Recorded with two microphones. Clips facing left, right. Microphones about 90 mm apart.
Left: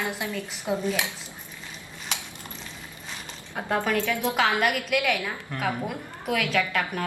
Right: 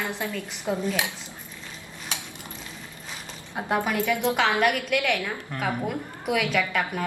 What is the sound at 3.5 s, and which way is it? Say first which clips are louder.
Speech: even; 20° right (ahead or behind).